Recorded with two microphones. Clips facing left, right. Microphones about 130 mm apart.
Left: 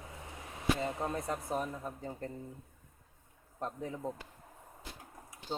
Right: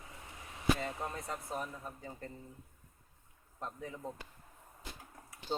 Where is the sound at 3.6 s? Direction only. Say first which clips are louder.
Left 4 dB; 35° left (ahead or behind).